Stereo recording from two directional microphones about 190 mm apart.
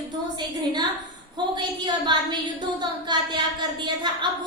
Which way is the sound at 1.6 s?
25° right (ahead or behind).